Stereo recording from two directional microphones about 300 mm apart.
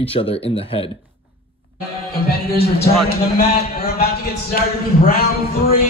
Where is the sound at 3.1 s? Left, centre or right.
Left.